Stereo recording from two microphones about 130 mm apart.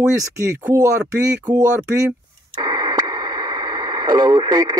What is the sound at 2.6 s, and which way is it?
Radio, 30° right (ahead or behind).